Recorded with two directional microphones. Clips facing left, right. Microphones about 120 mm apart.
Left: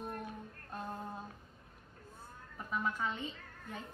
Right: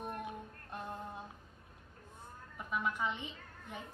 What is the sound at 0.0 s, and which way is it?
Female singing, 15° right (ahead or behind).